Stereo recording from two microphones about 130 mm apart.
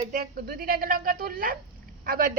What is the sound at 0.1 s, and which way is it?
A woman's voice, 90° right.